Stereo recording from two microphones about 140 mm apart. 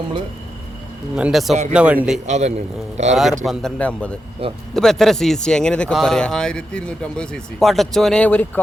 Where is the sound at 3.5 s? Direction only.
5° left (ahead or behind).